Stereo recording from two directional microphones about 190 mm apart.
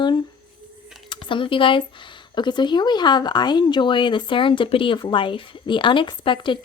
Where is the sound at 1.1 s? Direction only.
25° left (ahead or behind).